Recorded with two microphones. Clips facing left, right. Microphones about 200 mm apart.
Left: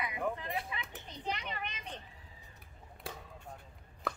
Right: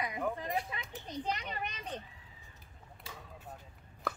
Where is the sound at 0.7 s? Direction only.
40° right (ahead or behind).